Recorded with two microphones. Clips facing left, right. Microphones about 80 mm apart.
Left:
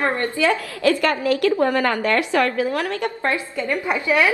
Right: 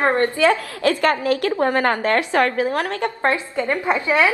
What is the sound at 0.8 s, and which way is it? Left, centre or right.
A woman's voice, right.